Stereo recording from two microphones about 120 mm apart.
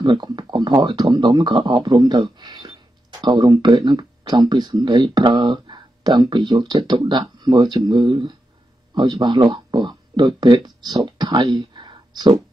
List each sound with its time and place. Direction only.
0.0 s speech: 40° right (ahead or behind)